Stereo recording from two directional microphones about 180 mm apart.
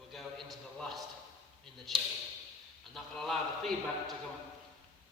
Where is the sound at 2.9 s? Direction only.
Centre (ahead or behind).